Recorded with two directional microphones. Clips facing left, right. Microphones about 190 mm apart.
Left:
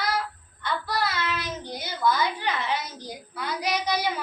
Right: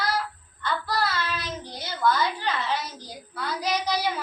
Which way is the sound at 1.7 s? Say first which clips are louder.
Right 1 dB; 10° left (ahead or behind).